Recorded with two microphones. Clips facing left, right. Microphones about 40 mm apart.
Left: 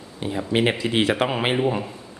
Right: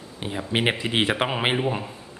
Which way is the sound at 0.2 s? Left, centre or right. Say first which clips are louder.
Left 4 dB; centre.